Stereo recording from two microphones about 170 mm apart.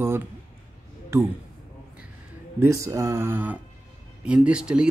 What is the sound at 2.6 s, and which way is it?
Speech, 20° right (ahead or behind).